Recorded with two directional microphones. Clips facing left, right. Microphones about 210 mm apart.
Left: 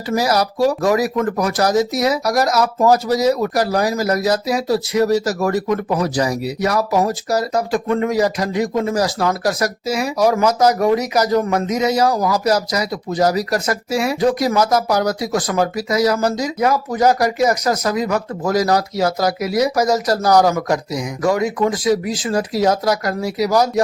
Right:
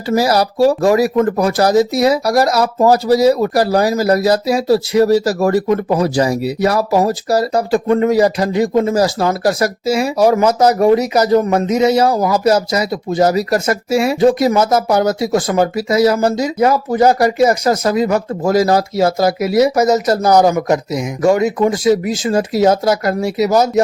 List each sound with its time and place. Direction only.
0.1 s speech: 30° right (ahead or behind)